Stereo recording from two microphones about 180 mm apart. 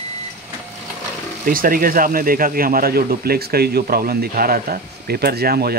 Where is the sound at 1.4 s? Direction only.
50° right (ahead or behind).